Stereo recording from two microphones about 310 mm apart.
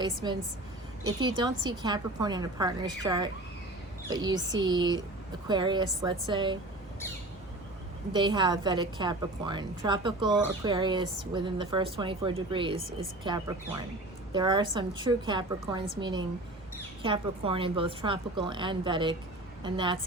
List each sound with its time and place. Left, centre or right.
0.0 s a woman's voice: centre
8.1 s a woman's voice: centre